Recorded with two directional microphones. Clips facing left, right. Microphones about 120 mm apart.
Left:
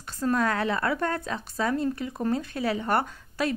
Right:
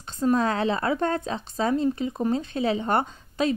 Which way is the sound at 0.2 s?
20° right (ahead or behind).